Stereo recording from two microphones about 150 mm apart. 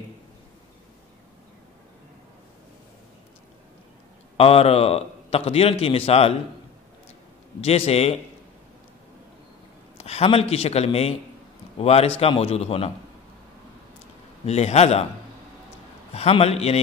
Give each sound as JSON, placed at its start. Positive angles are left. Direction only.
{"t": 4.4, "sound": "a man's voice", "side_deg": 40}
{"t": 7.6, "sound": "a man's voice", "side_deg": 45}
{"t": 9.9, "sound": "a man's voice", "side_deg": 45}
{"t": 14.4, "sound": "a man's voice", "side_deg": 45}
{"t": 16.1, "sound": "a man's voice", "side_deg": 40}